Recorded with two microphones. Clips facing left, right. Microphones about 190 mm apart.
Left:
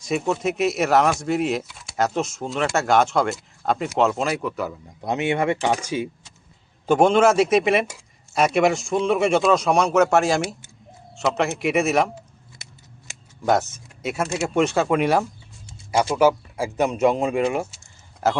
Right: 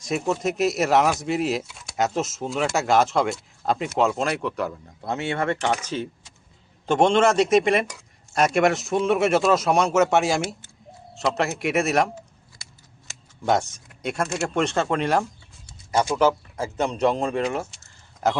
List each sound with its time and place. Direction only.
0.0 s speech: centre (ahead or behind)
5.0 s speech: 15° left (ahead or behind); by 12.1 s centre (ahead or behind)
12.6 s scissors: 20° left (ahead or behind)
13.4 s speech: centre (ahead or behind)